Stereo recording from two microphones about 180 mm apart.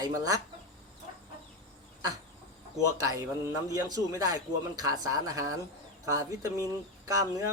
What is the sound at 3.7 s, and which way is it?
Speech, 20° right (ahead or behind).